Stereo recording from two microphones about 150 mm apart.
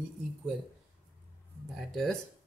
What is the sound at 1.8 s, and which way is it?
Speech, centre (ahead or behind).